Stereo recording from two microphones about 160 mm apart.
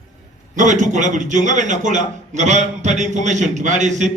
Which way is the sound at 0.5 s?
50° right (ahead or behind).